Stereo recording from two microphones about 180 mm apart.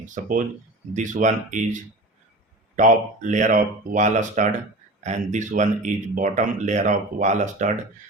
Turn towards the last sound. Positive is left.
turn(degrees=-40)  # may be behind; listen again after turning